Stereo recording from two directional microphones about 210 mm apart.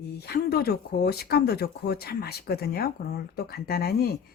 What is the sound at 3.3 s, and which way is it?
Speech, 50° left (ahead or behind).